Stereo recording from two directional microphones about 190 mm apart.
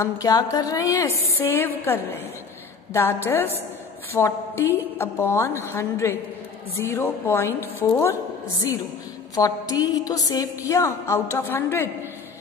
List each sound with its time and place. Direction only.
0.0 s a woman's voice: 20° left (ahead or behind)
9.3 s a woman's voice: 20° left (ahead or behind)